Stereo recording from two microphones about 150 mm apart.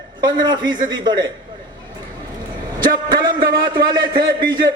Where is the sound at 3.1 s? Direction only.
30° right (ahead or behind).